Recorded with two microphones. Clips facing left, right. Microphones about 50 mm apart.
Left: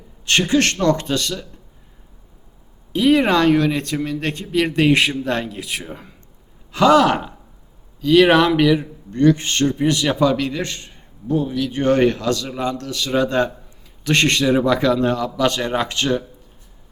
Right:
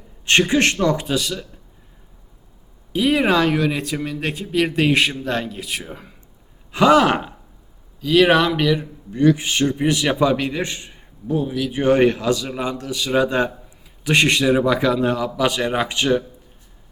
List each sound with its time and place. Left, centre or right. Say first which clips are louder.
0.3 s a man's voice: right 1 dB; right
2.9 s speech: left 2 dB; centre
6.7 s speech: left 1 dB; centre
8.0 s speech: left 2 dB; centre
9.1 s a man's voice: left 1 dB; centre